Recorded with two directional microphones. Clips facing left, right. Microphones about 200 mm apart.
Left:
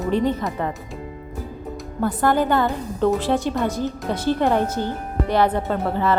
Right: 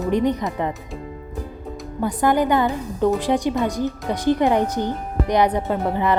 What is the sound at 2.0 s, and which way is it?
Speech, 15° right (ahead or behind).